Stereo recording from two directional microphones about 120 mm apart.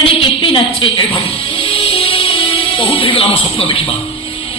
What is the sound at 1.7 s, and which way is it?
Music, 50° left (ahead or behind).